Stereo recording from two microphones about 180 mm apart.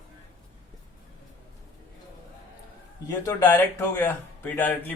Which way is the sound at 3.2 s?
10° left (ahead or behind).